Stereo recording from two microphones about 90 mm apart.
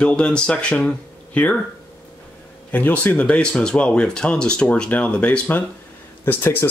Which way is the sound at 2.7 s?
20° left (ahead or behind).